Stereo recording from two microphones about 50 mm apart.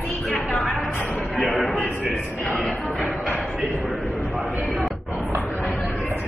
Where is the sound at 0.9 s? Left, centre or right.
Left.